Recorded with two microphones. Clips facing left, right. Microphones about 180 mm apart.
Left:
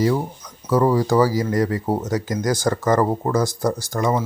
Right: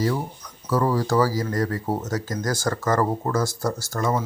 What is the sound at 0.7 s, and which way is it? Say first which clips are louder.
Speech: left 4 dB; 20° left (ahead or behind).